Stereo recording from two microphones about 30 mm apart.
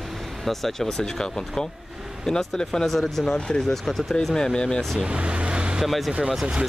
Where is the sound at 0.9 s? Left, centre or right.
Centre.